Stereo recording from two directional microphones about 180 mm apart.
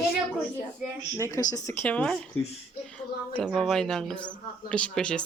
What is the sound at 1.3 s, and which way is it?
Speech, 15° left (ahead or behind).